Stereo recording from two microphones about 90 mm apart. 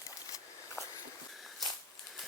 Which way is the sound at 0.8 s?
30° left (ahead or behind).